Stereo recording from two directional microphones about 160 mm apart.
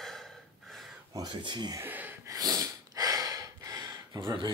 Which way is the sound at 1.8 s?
10° right (ahead or behind).